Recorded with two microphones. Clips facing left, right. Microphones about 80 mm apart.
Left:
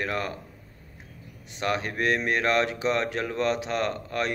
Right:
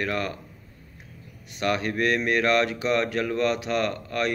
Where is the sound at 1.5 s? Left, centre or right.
Left.